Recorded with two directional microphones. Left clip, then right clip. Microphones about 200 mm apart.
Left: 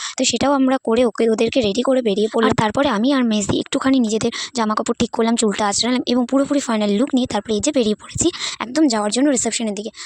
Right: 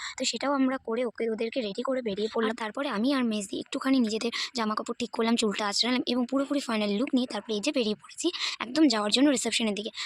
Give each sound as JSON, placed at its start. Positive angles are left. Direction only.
{"t": 0.2, "sound": "speech", "side_deg": 45}